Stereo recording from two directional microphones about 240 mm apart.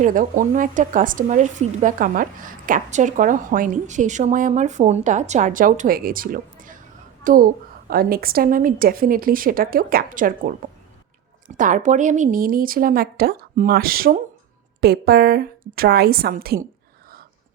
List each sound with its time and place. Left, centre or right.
0.0 s a woman's voice: right